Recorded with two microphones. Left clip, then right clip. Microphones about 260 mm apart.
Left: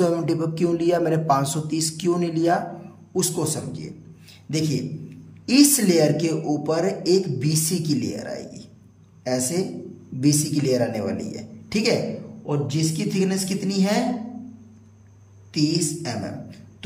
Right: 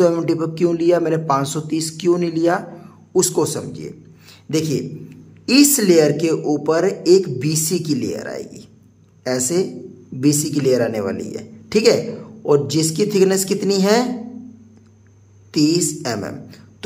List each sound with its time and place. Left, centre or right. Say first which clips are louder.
0.0 s a man's voice: right 5 dB; centre
15.5 s a man's voice: right 6 dB; centre